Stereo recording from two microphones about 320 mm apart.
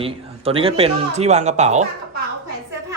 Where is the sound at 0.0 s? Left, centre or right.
Centre.